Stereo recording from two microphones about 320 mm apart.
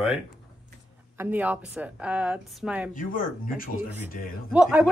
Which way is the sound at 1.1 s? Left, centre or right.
Centre.